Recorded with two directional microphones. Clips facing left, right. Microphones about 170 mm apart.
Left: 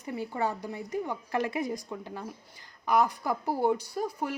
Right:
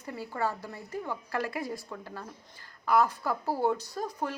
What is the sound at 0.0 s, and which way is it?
A woman's voice, 20° left (ahead or behind).